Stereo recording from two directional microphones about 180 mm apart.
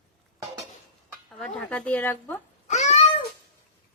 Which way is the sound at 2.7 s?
40° left (ahead or behind).